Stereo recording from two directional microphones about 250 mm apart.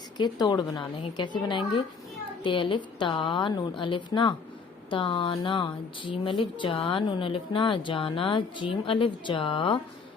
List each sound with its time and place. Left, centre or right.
0.2 s a woman's voice: centre